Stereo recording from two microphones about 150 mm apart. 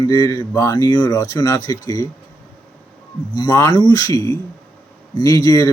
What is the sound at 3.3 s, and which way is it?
Speech, 25° left (ahead or behind).